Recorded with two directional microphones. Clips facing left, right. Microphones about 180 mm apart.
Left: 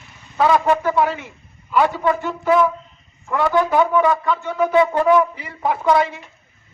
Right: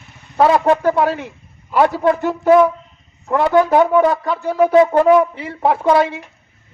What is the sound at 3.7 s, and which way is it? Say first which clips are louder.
Speech: right 4 dB; 45° right (ahead or behind).